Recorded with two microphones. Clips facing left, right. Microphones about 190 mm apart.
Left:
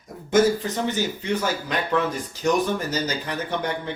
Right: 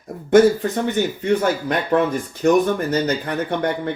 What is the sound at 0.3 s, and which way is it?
Speech, 60° right (ahead or behind).